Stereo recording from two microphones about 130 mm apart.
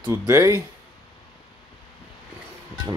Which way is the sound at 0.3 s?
20° right (ahead or behind).